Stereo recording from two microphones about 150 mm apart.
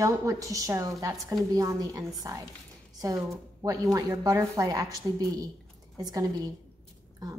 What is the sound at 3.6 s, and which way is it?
A woman's voice, 20° right (ahead or behind).